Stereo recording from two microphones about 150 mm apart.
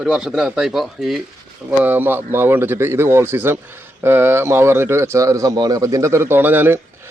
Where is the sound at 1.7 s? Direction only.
10° right (ahead or behind).